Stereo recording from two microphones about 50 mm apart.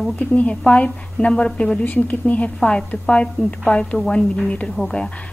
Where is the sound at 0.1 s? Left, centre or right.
Left.